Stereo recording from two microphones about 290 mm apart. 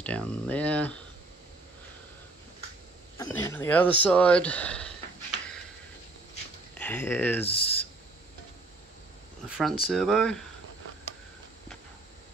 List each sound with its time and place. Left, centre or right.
0.0 s speech: centre
3.2 s speech: centre
6.8 s speech: centre
7.4 s speech: centre
9.8 s speech: centre